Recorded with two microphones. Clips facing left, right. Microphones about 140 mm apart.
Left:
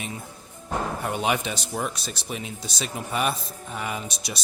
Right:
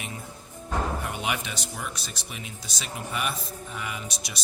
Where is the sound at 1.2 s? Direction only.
35° left (ahead or behind).